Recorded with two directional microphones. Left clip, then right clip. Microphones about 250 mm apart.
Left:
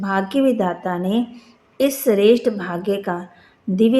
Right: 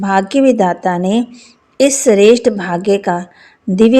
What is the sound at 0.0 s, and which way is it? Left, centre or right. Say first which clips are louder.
A woman's voice: right 7 dB; right.